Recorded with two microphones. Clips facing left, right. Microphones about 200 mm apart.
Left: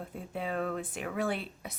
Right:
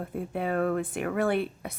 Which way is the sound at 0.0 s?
60° right (ahead or behind).